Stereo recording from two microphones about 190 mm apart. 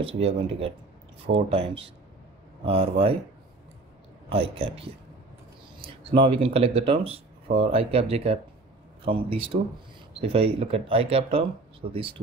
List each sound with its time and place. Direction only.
0.0 s speech: 30° right (ahead or behind)
4.3 s speech: 30° right (ahead or behind)